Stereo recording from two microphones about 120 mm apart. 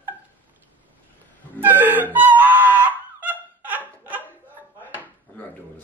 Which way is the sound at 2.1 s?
15° right (ahead or behind).